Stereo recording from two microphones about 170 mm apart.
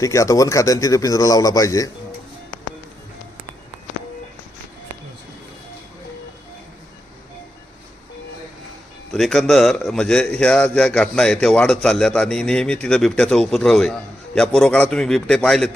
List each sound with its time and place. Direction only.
0.0 s a man's voice: 20° left (ahead or behind)
9.1 s a man's voice: centre (ahead or behind)